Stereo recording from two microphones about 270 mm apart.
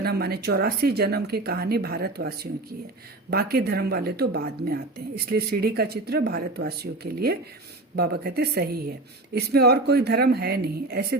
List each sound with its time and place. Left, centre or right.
0.0 s speech: right